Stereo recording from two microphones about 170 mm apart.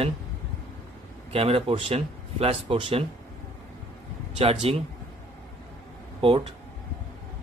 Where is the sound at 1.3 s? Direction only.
35° right (ahead or behind).